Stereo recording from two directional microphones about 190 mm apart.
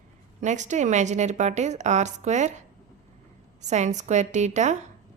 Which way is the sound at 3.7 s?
40° right (ahead or behind).